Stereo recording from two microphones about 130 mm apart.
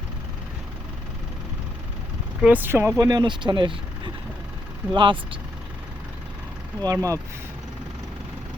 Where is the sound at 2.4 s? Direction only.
15° right (ahead or behind).